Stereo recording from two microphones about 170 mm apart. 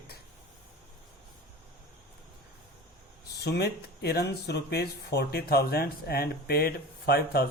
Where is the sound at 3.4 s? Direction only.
75° left (ahead or behind).